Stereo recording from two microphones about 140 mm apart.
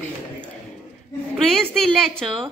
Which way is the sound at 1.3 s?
5° left (ahead or behind).